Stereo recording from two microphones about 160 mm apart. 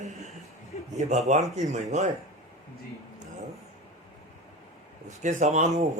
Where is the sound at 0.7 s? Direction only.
45° left (ahead or behind).